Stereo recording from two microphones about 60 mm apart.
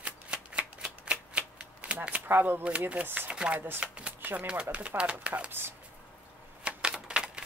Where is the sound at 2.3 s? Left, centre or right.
Right.